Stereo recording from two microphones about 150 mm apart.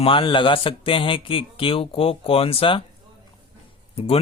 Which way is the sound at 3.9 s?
40° left (ahead or behind).